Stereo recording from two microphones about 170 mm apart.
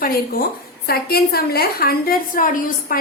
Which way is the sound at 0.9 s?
65° left (ahead or behind).